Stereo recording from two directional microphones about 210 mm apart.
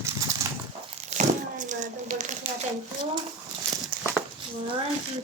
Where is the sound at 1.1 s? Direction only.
35° right (ahead or behind).